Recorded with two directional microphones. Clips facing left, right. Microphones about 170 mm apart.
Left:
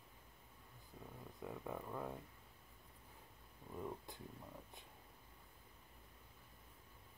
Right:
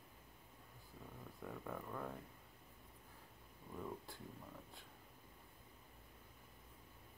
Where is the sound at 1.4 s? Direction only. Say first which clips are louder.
Left 1 dB; 15° left (ahead or behind).